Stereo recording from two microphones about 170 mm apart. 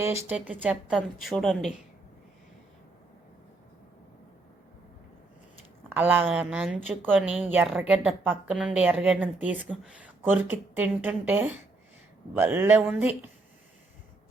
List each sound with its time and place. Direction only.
0.0 s a woman's voice: 15° right (ahead or behind); by 1.7 s centre (ahead or behind)
5.9 s a woman's voice: 10° right (ahead or behind)